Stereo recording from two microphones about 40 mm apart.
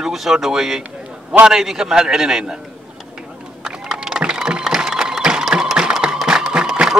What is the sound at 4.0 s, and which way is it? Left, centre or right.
Vehicle, centre.